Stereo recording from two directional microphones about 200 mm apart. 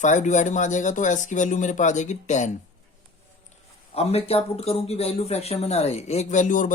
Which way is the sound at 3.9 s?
30° left (ahead or behind).